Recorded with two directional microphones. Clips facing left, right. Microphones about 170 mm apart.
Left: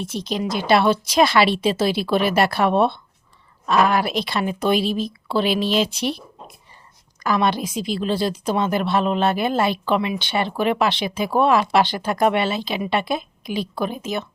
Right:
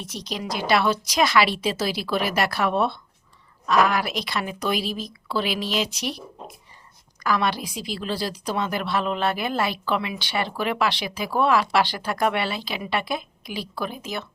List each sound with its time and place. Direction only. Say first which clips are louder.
0.0 s a woman's voice: left 7 dB; 25° left (ahead or behind)